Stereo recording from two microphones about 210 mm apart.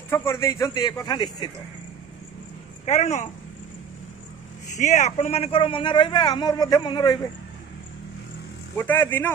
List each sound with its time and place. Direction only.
0.1 s speech: 10° left (ahead or behind)
2.8 s speech: 35° left (ahead or behind)
4.7 s a man's voice: 35° left (ahead or behind)
8.7 s speech: 10° left (ahead or behind)